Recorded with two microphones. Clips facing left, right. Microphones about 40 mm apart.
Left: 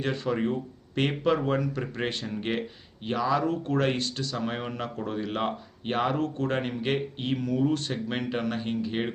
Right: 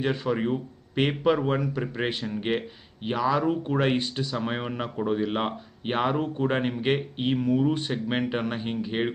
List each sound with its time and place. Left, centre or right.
0.0 s speech: centre